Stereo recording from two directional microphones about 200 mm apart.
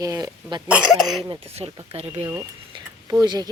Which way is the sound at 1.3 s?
30° right (ahead or behind).